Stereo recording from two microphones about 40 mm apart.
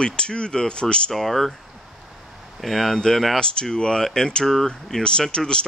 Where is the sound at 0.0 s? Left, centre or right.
Left.